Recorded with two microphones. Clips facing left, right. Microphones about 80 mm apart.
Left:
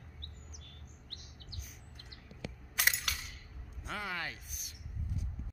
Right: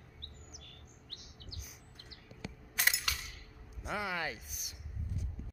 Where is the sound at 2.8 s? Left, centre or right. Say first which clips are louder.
Even; centre.